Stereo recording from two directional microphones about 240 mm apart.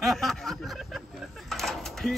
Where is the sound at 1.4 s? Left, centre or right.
Centre.